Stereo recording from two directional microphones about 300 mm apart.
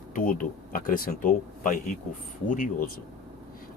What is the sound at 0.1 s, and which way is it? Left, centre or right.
Speech, left.